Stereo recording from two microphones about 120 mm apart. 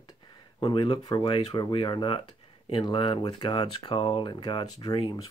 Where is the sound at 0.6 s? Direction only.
40° left (ahead or behind).